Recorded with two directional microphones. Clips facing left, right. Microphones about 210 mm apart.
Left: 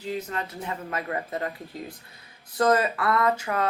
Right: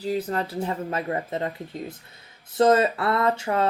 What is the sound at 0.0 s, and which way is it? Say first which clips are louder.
Speech: right 5 dB; 35° right (ahead or behind).